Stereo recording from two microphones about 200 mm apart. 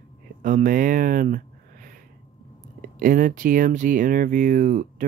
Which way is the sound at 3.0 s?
40° right (ahead or behind).